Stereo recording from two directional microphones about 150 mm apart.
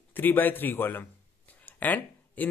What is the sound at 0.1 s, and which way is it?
Speech, 10° left (ahead or behind).